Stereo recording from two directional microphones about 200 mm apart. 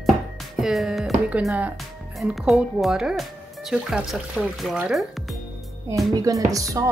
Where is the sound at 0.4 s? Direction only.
Centre (ahead or behind).